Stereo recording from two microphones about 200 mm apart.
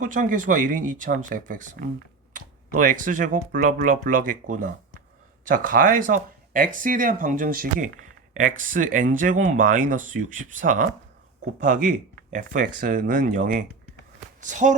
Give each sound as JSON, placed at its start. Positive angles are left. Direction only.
{"t": 0.0, "sound": "speech", "side_deg": -40}